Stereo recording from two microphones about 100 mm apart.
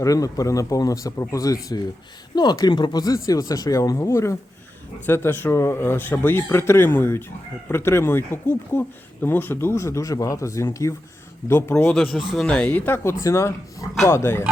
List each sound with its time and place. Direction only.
0.0 s speech: 35° left (ahead or behind)
11.7 s speech: 15° left (ahead or behind)
13.2 s speech: 30° left (ahead or behind)